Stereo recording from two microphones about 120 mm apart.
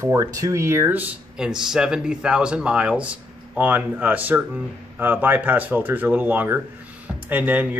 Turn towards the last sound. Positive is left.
turn(degrees=-15)  # may be behind; listen again after turning